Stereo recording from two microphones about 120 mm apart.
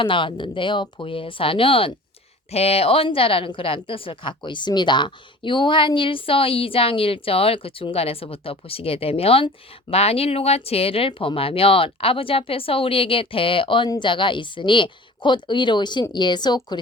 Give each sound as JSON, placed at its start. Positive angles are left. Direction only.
{"t": 0.0, "sound": "a woman's voice", "side_deg": 45}